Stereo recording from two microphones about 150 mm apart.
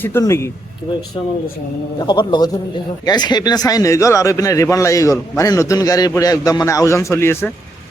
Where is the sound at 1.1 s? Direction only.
35° left (ahead or behind).